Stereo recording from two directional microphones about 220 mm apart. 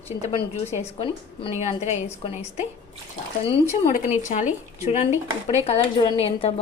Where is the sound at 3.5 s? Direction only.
30° left (ahead or behind).